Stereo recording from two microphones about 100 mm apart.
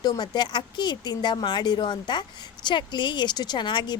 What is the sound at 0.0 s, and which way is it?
A woman's voice, 45° left (ahead or behind).